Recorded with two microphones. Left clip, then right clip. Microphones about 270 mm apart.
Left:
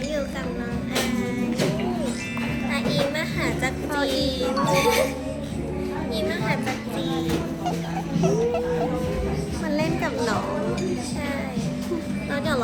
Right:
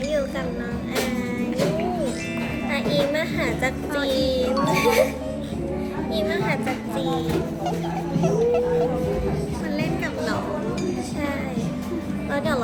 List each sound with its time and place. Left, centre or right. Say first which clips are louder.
2.7 s music: right 3 dB; centre
3.9 s music: right 1 dB; centre
4.3 s music: right 1 dB; centre
12.3 s music: right 1 dB; centre